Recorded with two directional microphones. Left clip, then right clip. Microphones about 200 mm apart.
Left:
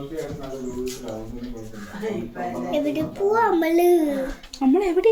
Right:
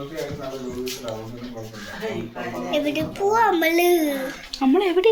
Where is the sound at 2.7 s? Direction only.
20° left (ahead or behind).